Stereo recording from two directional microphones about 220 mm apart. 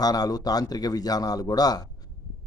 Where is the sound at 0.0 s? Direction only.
15° left (ahead or behind).